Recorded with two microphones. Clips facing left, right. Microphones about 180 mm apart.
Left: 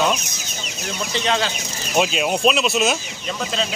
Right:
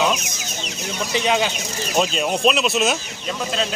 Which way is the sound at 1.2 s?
10° right (ahead or behind).